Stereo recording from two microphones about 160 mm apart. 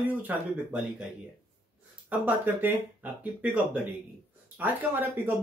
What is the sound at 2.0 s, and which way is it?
Speech, 10° right (ahead or behind).